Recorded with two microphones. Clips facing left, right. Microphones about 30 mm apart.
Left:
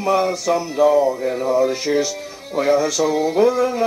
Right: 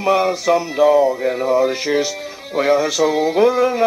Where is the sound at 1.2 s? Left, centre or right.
Centre.